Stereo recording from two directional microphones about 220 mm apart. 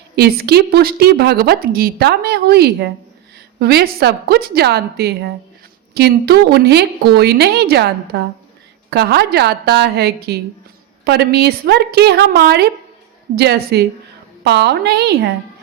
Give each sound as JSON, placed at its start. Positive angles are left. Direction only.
{"t": 0.2, "sound": "a woman's voice", "side_deg": -45}